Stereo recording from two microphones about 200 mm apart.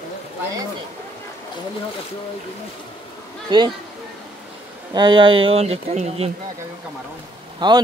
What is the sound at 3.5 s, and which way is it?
Speech, 20° right (ahead or behind).